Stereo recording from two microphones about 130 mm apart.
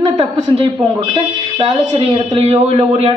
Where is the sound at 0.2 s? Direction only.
50° right (ahead or behind).